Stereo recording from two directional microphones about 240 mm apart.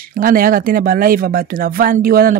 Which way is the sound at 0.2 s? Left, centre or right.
Right.